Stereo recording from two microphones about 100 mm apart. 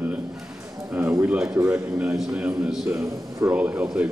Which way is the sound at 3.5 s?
15° right (ahead or behind).